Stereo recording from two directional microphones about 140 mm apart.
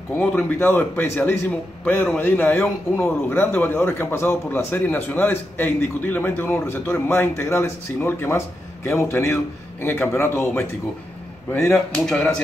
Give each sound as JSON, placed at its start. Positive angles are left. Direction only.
{"t": 0.2, "sound": "a man's voice", "side_deg": 10}
{"t": 11.9, "sound": "a man's voice", "side_deg": 10}